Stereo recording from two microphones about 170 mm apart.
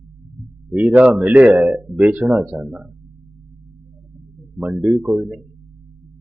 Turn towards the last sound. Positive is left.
turn(degrees=-5)  # may be behind; listen again after turning